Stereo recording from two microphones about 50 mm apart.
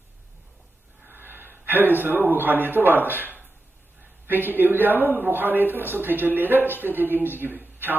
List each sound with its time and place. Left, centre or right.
1.0 s a man's voice: right